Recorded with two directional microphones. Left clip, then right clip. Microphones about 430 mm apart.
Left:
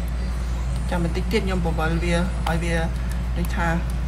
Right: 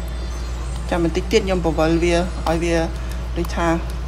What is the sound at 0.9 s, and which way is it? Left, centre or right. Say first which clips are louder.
A woman's voice: right 7 dB; centre.